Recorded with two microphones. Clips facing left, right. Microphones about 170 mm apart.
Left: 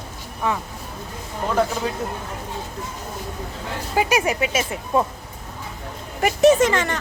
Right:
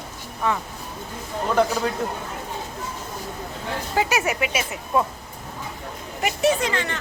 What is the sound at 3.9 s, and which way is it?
Speech, 20° left (ahead or behind).